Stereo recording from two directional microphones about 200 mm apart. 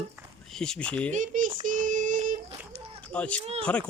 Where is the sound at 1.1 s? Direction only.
40° right (ahead or behind).